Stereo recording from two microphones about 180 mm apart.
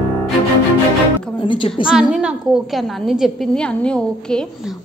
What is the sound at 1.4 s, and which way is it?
Speech, 25° left (ahead or behind).